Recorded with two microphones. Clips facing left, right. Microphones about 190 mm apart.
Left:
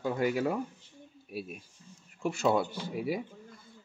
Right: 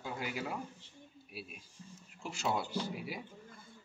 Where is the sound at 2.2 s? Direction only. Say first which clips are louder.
Left 9 dB; 55° left (ahead or behind).